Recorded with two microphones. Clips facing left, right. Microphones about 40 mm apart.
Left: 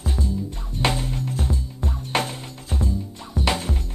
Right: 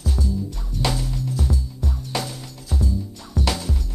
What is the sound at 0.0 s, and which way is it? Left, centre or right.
Music, left.